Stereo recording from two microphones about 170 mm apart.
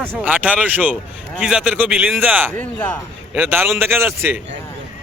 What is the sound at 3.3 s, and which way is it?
A man's voice, 10° right (ahead or behind).